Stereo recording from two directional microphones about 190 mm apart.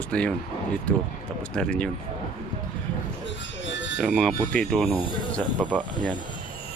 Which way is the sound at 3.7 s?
70° left (ahead or behind).